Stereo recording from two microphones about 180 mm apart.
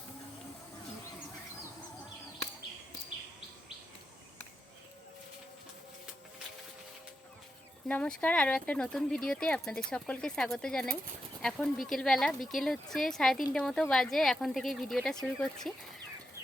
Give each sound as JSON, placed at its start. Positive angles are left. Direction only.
{"t": 7.9, "sound": "speech", "side_deg": 5}